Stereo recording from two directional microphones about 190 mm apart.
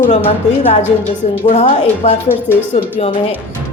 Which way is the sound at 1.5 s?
30° left (ahead or behind).